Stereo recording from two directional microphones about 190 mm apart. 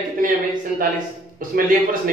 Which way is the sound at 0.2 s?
45° right (ahead or behind).